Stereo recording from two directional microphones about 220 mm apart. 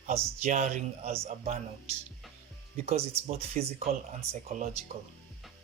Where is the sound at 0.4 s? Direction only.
30° right (ahead or behind).